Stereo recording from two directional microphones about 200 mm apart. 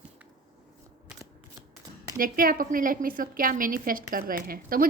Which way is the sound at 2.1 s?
45° right (ahead or behind).